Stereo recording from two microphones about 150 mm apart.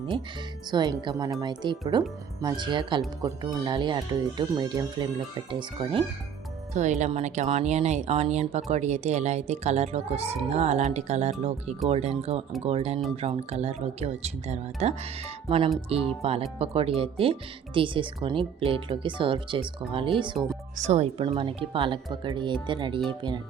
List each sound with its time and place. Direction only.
0.7 s speech: 30° right (ahead or behind)
6.7 s speech: 50° right (ahead or behind)
15.4 s speech: 35° right (ahead or behind)
20.7 s speech: 50° right (ahead or behind); by 23.4 s 30° right (ahead or behind)